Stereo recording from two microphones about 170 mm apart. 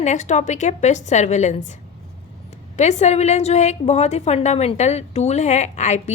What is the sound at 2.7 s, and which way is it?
A woman's voice, 45° left (ahead or behind).